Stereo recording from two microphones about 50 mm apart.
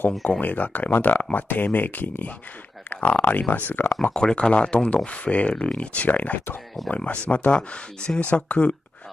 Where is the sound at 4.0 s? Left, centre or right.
Centre.